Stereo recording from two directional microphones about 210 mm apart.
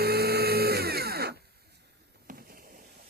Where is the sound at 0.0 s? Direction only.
50° right (ahead or behind).